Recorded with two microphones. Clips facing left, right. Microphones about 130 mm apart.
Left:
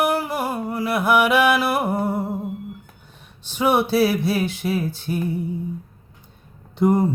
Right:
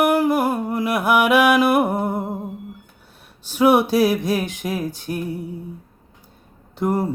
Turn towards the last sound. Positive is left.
turn(degrees=-5)  # may be behind; listen again after turning